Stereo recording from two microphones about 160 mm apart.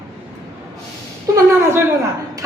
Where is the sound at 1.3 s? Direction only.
15° right (ahead or behind).